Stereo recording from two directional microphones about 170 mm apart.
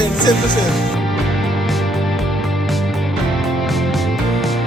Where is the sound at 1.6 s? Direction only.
Centre (ahead or behind).